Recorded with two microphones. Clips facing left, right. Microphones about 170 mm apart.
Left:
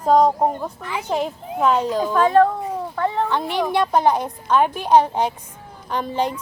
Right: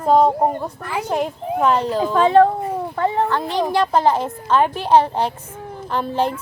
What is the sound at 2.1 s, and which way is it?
Speech, 25° right (ahead or behind).